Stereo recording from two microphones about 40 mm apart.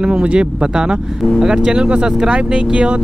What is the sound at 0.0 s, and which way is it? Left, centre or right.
Speech, right.